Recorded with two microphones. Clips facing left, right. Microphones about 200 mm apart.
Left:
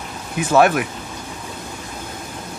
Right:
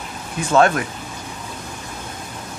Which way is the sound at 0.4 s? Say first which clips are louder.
Left 1 dB; 10° left (ahead or behind).